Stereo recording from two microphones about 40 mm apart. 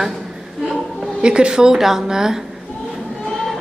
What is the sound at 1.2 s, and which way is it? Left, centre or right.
A woman's voice, right.